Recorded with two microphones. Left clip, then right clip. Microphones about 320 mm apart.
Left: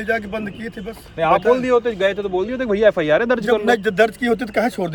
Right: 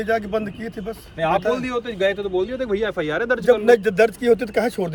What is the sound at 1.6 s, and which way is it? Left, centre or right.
Speech, centre.